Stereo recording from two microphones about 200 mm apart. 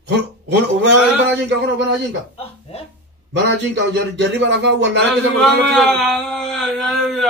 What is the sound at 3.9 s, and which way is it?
Speech, 55° right (ahead or behind).